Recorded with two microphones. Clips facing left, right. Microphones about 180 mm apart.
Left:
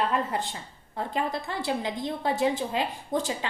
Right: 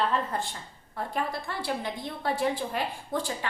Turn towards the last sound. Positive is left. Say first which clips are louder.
# left 3 dB
turn(degrees=20)  # may be behind; listen again after turning